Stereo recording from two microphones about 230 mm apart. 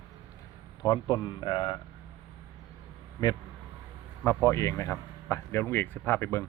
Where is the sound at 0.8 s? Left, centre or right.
Centre.